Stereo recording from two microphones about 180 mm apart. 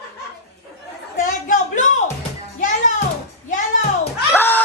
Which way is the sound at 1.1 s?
45° left (ahead or behind).